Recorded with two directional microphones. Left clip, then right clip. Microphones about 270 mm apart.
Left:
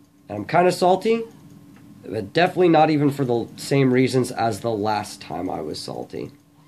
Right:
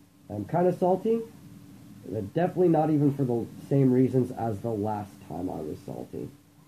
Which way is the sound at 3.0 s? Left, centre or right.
Centre.